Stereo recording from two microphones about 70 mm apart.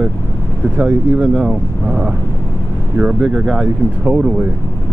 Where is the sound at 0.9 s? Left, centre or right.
Right.